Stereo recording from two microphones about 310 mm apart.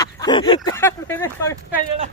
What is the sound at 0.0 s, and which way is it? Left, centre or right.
Speech, centre.